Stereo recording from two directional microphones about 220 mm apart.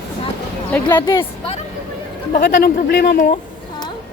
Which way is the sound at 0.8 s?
20° left (ahead or behind).